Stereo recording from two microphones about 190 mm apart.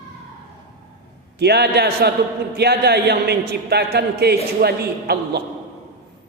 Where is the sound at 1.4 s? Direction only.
60° right (ahead or behind).